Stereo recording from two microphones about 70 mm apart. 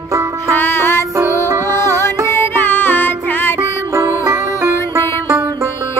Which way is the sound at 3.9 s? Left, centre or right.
Right.